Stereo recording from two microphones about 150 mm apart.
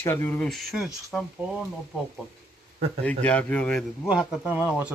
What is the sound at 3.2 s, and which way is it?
Speech, 10° left (ahead or behind).